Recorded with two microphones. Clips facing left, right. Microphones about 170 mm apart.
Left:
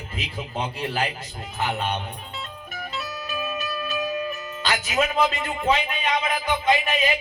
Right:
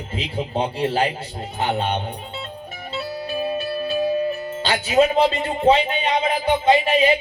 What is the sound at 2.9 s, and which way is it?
Music, 30° right (ahead or behind).